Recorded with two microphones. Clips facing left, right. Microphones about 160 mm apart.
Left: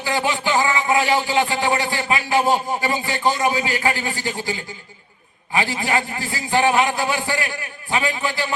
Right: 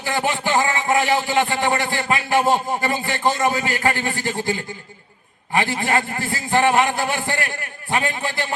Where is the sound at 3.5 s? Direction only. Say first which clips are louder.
Even; 50° right (ahead or behind).